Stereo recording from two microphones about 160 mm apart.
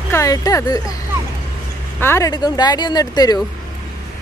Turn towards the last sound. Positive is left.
turn(degrees=25)  # may be behind; listen again after turning